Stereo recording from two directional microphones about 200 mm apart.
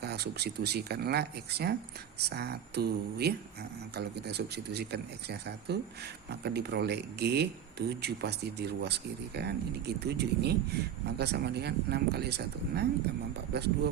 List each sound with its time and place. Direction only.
0.0 s speech: 55° right (ahead or behind)